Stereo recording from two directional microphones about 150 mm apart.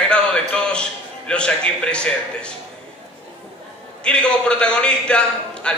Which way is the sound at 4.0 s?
5° left (ahead or behind).